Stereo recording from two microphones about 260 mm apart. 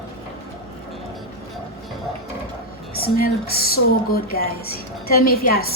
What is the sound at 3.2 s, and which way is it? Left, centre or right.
A woman's voice, left.